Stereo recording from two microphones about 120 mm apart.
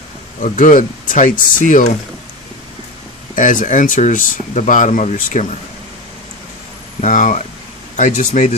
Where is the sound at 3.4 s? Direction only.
90° left.